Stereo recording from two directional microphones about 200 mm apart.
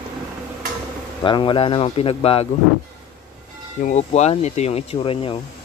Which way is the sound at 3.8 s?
35° left (ahead or behind).